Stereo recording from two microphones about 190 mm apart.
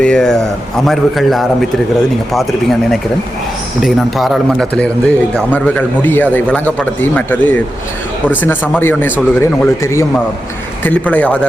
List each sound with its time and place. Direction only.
0.0 s speech: 5° left (ahead or behind)
3.8 s a man's voice: centre (ahead or behind)